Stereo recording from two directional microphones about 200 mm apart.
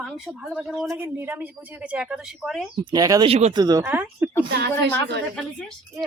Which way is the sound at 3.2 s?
30° right (ahead or behind).